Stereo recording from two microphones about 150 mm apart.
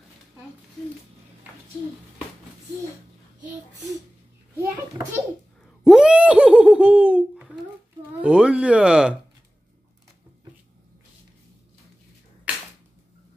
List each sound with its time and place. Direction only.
4.6 s children playing: 20° right (ahead or behind)
5.9 s laughter: 5° right (ahead or behind)
8.2 s a sound: 5° right (ahead or behind)